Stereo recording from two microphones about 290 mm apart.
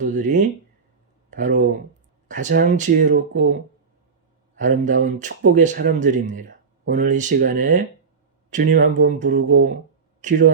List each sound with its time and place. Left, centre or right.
0.0 s speech: right
4.5 s speech: right